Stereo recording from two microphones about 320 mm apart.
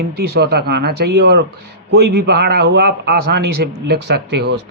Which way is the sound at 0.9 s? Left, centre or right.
Right.